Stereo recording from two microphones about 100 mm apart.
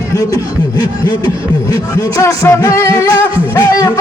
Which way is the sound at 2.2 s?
30° left (ahead or behind).